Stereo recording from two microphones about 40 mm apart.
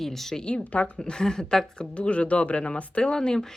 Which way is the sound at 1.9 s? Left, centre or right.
Left.